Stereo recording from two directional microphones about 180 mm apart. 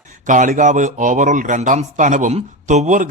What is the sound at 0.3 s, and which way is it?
Speech, 45° right (ahead or behind).